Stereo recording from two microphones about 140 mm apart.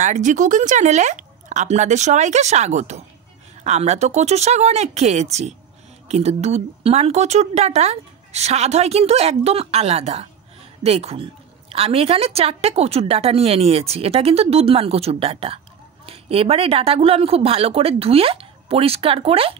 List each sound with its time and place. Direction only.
0.0 s a woman's voice: 65° right (ahead or behind); by 19.5 s 45° right (ahead or behind)